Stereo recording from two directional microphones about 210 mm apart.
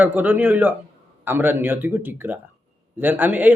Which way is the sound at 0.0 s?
10° right (ahead or behind).